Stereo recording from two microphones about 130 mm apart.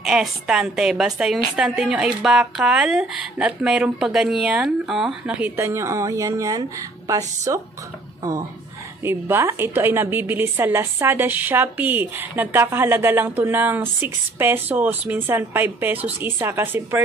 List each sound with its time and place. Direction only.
0.0 s a woman's voice: 5° right (ahead or behind)
5.6 s a man's voice: 20° right (ahead or behind)